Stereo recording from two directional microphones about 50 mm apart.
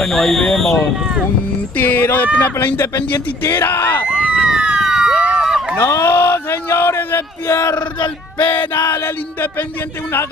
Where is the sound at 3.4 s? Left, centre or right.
Left.